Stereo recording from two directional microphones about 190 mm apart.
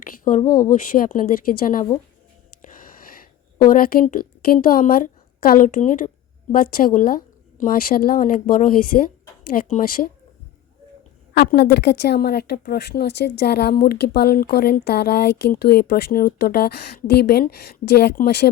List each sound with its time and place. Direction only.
0.0 s a woman's voice: 45° left (ahead or behind)
3.6 s a woman's voice: 45° left (ahead or behind)
11.3 s a woman's voice: 60° left (ahead or behind)